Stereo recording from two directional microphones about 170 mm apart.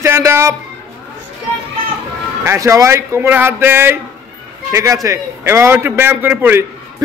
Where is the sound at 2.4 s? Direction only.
20° right (ahead or behind).